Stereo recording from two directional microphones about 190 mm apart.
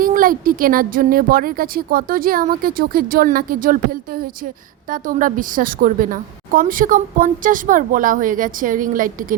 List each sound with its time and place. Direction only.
0.0 s a woman's voice: 45° right (ahead or behind)